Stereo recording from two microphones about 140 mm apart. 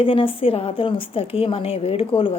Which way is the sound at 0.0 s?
40° left (ahead or behind).